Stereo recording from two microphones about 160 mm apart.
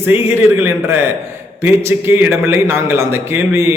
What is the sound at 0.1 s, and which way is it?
A man's voice, 15° right (ahead or behind).